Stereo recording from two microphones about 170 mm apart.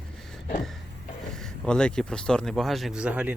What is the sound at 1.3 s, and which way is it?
Speech, 5° left (ahead or behind).